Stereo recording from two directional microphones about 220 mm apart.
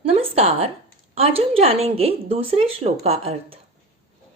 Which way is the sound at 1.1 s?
25° right (ahead or behind).